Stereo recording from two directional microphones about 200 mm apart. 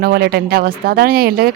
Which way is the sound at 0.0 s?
50° right (ahead or behind).